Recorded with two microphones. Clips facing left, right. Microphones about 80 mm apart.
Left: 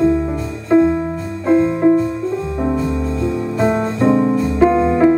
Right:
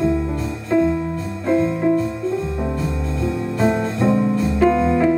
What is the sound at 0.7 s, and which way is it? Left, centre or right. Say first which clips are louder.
Music: left 5 dB; left.